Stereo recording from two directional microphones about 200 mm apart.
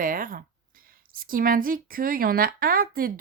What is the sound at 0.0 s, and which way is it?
Speech, 45° right (ahead or behind).